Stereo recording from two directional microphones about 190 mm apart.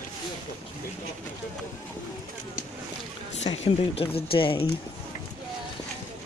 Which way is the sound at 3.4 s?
30° left (ahead or behind).